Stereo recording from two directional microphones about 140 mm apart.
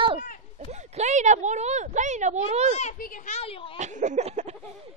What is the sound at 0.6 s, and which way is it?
Speech, 50° right (ahead or behind).